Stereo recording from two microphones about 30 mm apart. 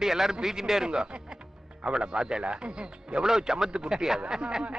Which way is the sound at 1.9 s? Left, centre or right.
Right.